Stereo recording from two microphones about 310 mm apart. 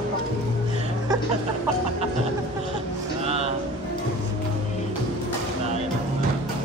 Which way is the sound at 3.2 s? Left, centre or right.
Centre.